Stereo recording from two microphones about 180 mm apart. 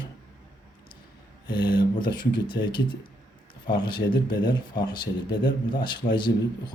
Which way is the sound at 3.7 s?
25° left (ahead or behind).